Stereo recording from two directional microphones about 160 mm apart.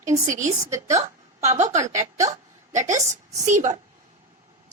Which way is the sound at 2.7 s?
50° right (ahead or behind).